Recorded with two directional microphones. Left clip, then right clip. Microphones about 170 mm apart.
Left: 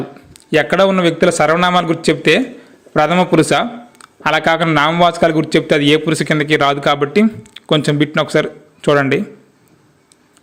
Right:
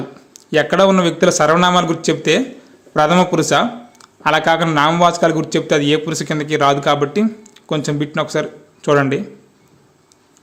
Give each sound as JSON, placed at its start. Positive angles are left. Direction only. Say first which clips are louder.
{"t": 0.3, "sound": "speech", "louder": "left 1 dB", "side_deg": 15}